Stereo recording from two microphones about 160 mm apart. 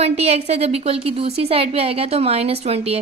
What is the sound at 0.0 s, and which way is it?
A woman's voice, 40° right (ahead or behind).